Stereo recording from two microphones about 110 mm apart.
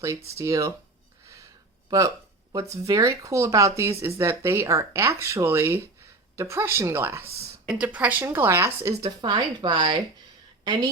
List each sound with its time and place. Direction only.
0.3 s speech: 30° right (ahead or behind)
1.9 s speech: 30° right (ahead or behind)
7.7 s a woman's voice: 10° right (ahead or behind); by 10.8 s 40° right (ahead or behind)